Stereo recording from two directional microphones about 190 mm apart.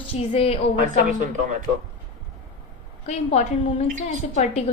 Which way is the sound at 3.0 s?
35° left (ahead or behind).